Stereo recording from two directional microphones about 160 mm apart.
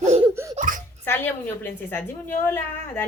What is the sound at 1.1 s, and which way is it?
A woman's voice, 15° left (ahead or behind).